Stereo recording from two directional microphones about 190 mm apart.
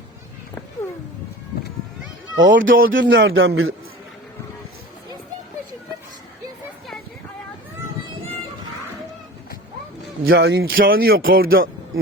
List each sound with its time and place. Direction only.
2.4 s speech: 80° right
10.2 s a man's voice: 60° right (ahead or behind); by 10.8 s 75° right (ahead or behind)
10.8 s speech: 50° right (ahead or behind)
11.4 s speech: 90° right